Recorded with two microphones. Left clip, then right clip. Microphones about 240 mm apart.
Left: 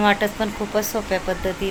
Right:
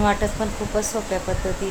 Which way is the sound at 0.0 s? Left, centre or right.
Centre.